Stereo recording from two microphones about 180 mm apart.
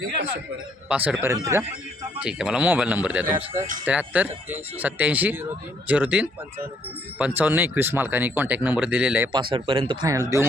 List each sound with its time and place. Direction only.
0.9 s speech: 10° right (ahead or behind)
2.2 s speech: 5° right (ahead or behind)
9.3 s speech: 30° right (ahead or behind)